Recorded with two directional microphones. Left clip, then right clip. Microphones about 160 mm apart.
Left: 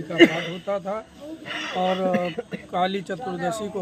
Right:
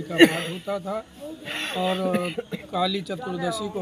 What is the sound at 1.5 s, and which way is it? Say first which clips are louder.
Speech: right 1 dB; 55° right (ahead or behind).